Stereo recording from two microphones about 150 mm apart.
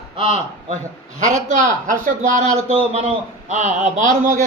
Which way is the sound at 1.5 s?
60° right (ahead or behind).